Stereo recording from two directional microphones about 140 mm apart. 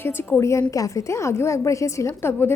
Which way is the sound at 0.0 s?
15° left (ahead or behind).